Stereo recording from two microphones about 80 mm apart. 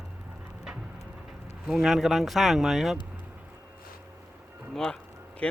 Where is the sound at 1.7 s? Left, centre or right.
Centre.